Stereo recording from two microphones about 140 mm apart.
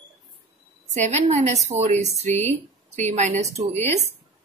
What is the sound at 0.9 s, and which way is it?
A woman's voice, 55° right (ahead or behind).